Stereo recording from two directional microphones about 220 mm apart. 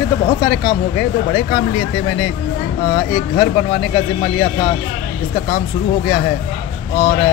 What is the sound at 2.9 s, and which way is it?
Speech, 20° left (ahead or behind).